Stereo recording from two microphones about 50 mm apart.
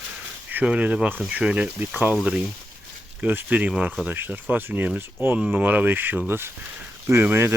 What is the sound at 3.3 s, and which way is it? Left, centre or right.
Speech, right.